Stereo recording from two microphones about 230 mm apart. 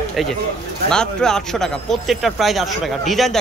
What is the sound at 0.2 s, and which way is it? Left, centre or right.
Speech, centre.